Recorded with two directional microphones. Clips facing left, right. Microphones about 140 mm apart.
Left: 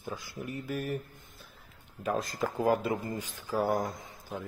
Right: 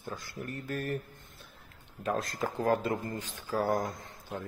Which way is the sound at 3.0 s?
15° left (ahead or behind).